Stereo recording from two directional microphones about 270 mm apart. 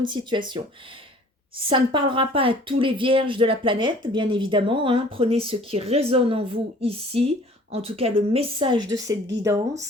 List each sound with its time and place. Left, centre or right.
0.0 s a woman's voice: centre